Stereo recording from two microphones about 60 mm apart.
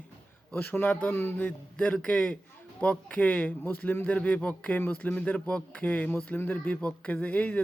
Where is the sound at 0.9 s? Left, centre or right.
Left.